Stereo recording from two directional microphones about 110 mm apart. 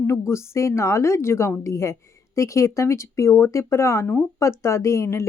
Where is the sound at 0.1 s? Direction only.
25° left (ahead or behind).